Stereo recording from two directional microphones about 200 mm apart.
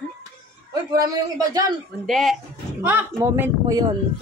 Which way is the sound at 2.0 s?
Centre (ahead or behind).